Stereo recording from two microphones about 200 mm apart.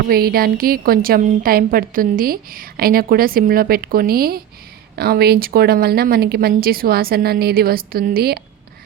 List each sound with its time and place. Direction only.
0.1 s a woman's voice: 50° right (ahead or behind)